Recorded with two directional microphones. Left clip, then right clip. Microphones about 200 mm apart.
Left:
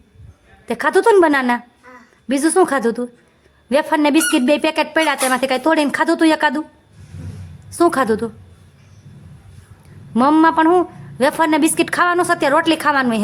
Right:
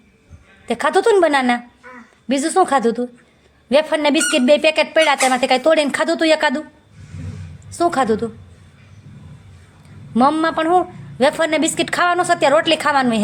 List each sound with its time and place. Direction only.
0.6 s a woman's voice: 10° left (ahead or behind)
7.7 s a woman's voice: 20° left (ahead or behind)
10.2 s a woman's voice: 15° left (ahead or behind)